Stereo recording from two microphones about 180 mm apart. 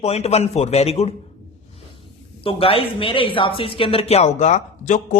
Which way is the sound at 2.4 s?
30° left (ahead or behind).